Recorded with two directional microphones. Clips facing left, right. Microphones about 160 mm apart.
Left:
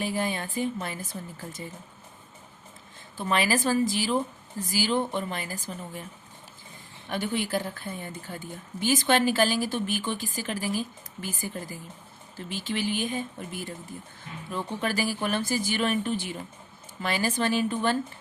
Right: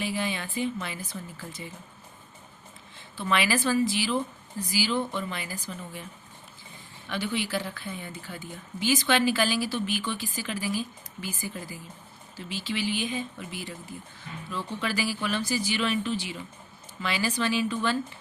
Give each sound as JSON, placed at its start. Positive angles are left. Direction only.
{"t": 0.0, "sound": "speech", "side_deg": 45}
{"t": 3.2, "sound": "speech", "side_deg": 40}
{"t": 7.1, "sound": "speech", "side_deg": 45}